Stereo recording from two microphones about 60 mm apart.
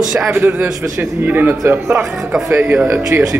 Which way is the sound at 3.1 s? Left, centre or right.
Right.